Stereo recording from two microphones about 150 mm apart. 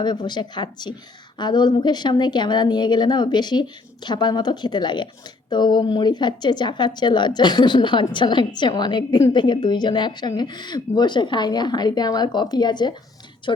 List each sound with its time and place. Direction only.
0.0 s a woman's voice: 30° left (ahead or behind)